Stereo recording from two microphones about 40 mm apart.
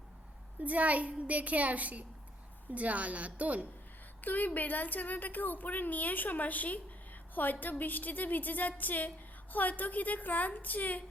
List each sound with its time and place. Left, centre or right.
0.6 s a child's voice: right
4.2 s a woman's voice: left